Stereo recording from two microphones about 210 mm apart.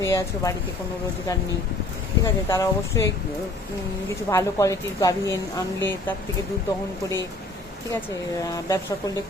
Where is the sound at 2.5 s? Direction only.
15° left (ahead or behind).